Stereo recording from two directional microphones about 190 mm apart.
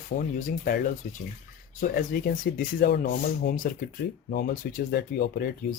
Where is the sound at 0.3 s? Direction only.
45° left (ahead or behind).